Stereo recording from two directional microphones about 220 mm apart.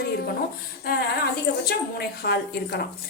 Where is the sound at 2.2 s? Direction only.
45° left (ahead or behind).